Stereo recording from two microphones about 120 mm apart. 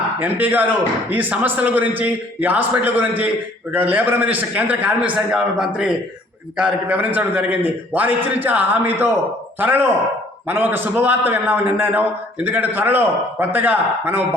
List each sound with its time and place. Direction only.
0.2 s a man's voice: 15° right (ahead or behind)